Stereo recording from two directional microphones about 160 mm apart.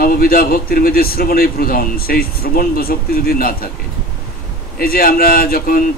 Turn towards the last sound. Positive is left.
turn(degrees=65)  # may be behind; listen again after turning